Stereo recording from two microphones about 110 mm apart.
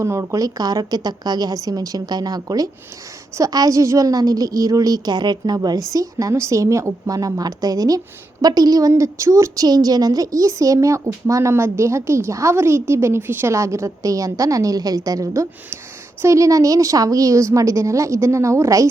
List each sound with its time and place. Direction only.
0.0 s a woman's voice: 25° right (ahead or behind)